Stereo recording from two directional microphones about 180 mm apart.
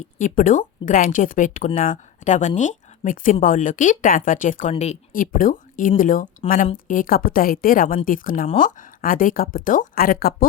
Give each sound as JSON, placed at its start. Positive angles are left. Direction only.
{"t": 0.0, "sound": "speech", "side_deg": 45}